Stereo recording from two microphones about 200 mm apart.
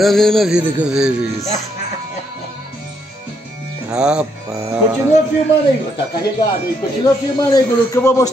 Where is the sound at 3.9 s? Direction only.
5° right (ahead or behind).